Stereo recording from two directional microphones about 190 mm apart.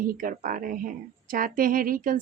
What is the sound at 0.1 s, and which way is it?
Speech, 45° right (ahead or behind).